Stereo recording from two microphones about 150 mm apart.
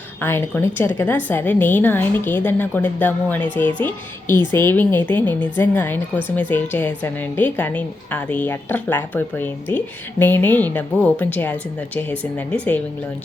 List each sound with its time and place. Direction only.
0.2 s a woman's voice: 15° left (ahead or behind)